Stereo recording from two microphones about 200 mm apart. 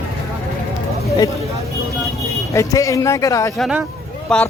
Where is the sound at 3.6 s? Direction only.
5° right (ahead or behind).